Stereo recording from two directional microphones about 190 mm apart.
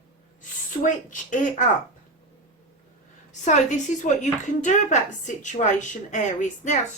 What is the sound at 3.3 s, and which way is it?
A woman's voice, 40° left (ahead or behind).